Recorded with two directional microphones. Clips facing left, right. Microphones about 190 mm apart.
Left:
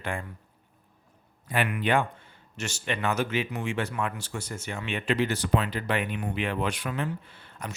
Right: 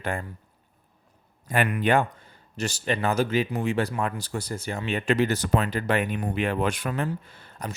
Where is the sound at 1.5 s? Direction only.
45° right (ahead or behind).